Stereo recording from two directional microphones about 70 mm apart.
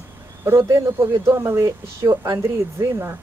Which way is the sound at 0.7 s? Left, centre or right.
Right.